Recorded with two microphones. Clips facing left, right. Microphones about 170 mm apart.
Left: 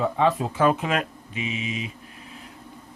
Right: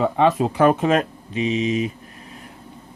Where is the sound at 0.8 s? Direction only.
35° right (ahead or behind).